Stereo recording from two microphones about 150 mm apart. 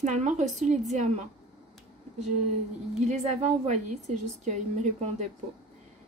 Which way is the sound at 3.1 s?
45° right (ahead or behind).